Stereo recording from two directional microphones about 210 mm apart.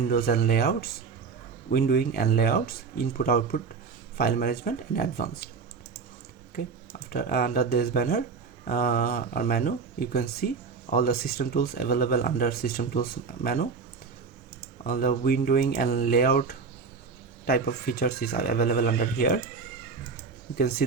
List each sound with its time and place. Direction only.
0.1 s speech: 45° left (ahead or behind)
7.1 s speech: 45° left (ahead or behind)
14.8 s speech: 45° left (ahead or behind)
20.6 s speech: 45° left (ahead or behind)